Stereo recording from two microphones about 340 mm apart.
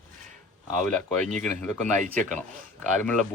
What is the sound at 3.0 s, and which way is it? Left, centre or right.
Speech, centre.